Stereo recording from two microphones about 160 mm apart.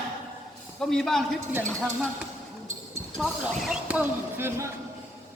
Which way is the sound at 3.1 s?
Centre (ahead or behind).